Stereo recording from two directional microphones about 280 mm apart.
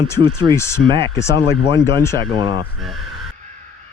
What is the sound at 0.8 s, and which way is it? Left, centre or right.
Speech, centre.